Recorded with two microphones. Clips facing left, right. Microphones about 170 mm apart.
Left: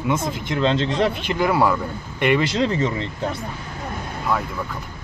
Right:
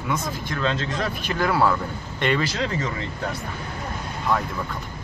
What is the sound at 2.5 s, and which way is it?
Speech, 30° left (ahead or behind).